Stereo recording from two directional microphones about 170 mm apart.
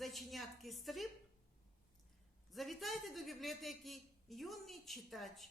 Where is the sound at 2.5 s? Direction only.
Centre (ahead or behind).